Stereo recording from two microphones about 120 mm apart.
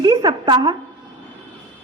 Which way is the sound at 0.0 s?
35° right (ahead or behind).